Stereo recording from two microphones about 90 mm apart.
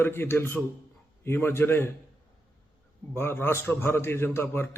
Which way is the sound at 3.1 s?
25° left (ahead or behind).